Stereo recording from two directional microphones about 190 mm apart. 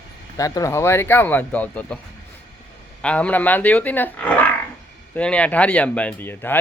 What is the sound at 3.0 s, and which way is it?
Speech, 5° left (ahead or behind).